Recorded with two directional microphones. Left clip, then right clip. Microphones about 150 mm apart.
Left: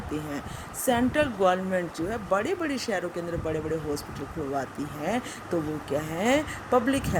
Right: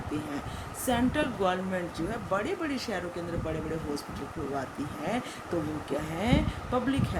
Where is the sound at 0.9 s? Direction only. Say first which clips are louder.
Left 4 dB; 45° left (ahead or behind).